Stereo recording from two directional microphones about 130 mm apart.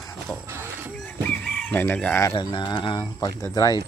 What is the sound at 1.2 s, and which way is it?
Chicken, 10° left (ahead or behind).